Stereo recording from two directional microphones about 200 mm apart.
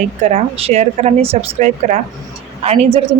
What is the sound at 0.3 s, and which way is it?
Speech, 35° right (ahead or behind).